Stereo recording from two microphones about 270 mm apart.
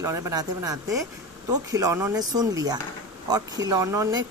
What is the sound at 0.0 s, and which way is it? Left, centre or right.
Speech, centre.